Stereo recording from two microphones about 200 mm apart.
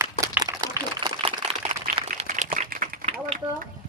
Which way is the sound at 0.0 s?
15° right (ahead or behind).